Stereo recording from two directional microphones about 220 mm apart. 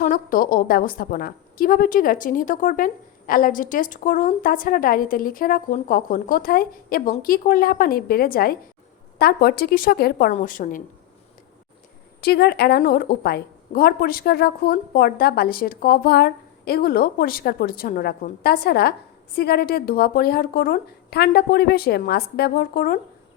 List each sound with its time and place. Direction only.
0.0 s a woman's voice: 40° left (ahead or behind)
12.2 s a woman's voice: 45° left (ahead or behind)